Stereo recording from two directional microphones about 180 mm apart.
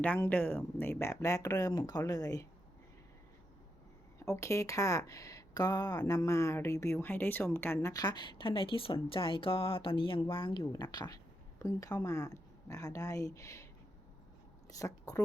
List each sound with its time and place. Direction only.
0.0 s speech: 10° left (ahead or behind)
4.3 s speech: 15° left (ahead or behind)
10.6 s speech: 15° left (ahead or behind)
14.7 s speech: 20° left (ahead or behind)